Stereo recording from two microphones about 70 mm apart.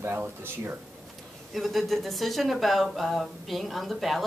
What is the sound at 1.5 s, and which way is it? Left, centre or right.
Speech, centre.